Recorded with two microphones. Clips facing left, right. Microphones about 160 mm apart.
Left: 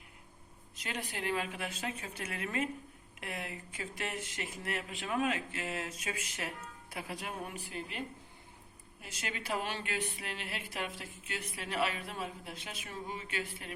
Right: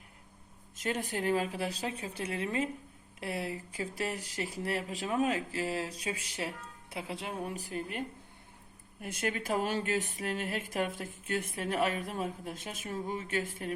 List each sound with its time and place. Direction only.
0.8 s speech: 45° right (ahead or behind)